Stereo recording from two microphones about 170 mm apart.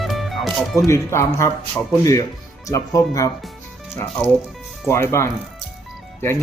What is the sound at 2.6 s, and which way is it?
Speech, 20° left (ahead or behind).